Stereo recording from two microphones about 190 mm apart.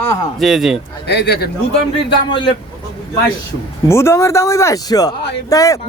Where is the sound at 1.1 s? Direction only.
60° left (ahead or behind).